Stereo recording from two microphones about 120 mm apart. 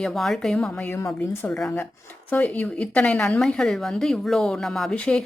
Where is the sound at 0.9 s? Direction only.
20° left (ahead or behind).